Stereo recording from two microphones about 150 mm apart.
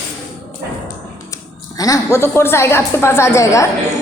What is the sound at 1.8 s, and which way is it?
A woman's voice, 20° left (ahead or behind).